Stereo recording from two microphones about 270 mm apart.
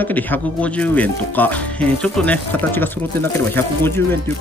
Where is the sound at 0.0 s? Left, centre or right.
Centre.